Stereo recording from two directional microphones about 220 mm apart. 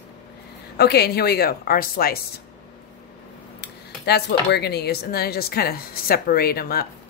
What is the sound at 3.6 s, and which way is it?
A woman's voice, 50° left (ahead or behind).